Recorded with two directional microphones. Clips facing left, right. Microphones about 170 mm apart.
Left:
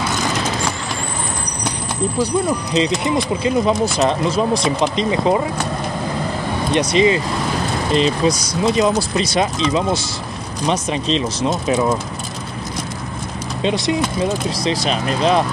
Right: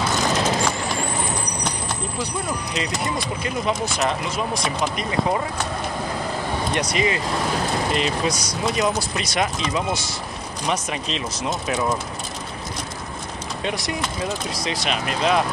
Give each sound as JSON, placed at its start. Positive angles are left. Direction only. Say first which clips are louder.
{"t": 2.7, "sound": "speech", "louder": "left 9 dB", "side_deg": 25}
{"t": 6.7, "sound": "speech", "louder": "left 9 dB", "side_deg": 25}
{"t": 13.6, "sound": "speech", "louder": "left 9 dB", "side_deg": 25}
{"t": 14.5, "sound": "speech", "louder": "left 6 dB", "side_deg": 35}